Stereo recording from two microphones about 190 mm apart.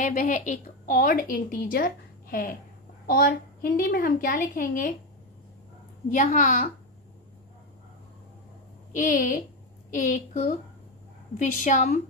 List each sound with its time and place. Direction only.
0.0 s a woman's voice: 40° left (ahead or behind)
6.1 s a woman's voice: 40° left (ahead or behind)
8.9 s a woman's voice: 45° left (ahead or behind)